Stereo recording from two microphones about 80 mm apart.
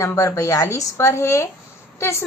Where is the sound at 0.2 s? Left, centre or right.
Left.